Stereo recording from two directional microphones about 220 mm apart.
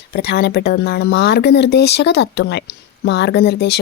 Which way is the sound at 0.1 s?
45° left (ahead or behind).